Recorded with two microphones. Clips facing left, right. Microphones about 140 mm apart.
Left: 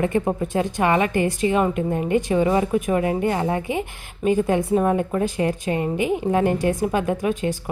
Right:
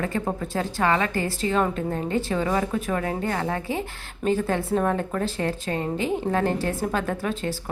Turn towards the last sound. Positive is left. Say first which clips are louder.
# left 5 dB
turn(degrees=15)  # may be behind; listen again after turning